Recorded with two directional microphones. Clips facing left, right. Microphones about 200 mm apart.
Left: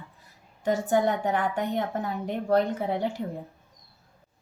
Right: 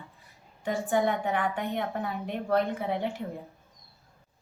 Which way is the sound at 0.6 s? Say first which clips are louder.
Left 3 dB; 40° left (ahead or behind).